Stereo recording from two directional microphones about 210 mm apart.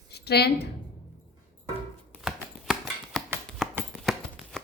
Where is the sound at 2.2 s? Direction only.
Centre (ahead or behind).